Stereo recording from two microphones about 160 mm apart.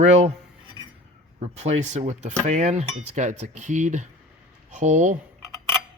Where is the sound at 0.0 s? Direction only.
45° right (ahead or behind).